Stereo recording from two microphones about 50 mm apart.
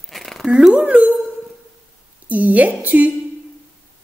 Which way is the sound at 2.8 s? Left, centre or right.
Right.